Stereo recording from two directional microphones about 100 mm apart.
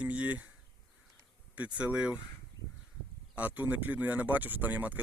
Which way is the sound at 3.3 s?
15° right (ahead or behind).